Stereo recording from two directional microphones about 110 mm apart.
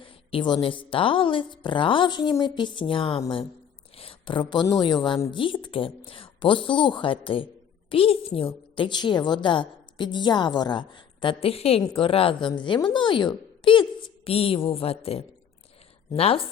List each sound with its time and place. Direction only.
0.0 s a woman's voice: 50° left (ahead or behind)